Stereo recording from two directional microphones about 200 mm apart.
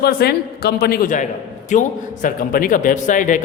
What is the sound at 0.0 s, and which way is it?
A woman's voice, 50° left (ahead or behind).